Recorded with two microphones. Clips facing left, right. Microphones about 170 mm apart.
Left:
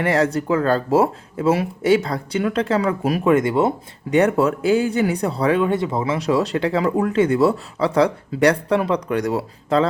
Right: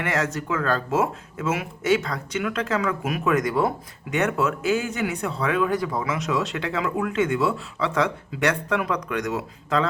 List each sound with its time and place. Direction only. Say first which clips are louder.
0.0 s speech: left 7 dB; 35° left (ahead or behind)